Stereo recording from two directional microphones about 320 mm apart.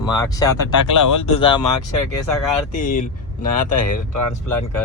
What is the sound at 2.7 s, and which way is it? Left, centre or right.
Speech, left.